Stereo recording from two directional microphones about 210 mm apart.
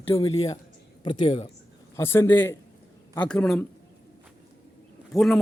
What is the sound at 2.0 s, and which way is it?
A man's voice, 10° left (ahead or behind).